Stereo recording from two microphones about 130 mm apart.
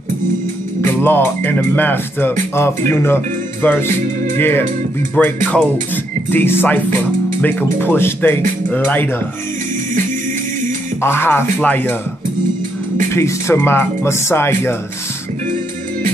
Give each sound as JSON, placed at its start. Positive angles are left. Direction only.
{"t": 0.8, "sound": "speech", "side_deg": 15}
{"t": 11.0, "sound": "speech", "side_deg": 15}
{"t": 13.1, "sound": "speech", "side_deg": 20}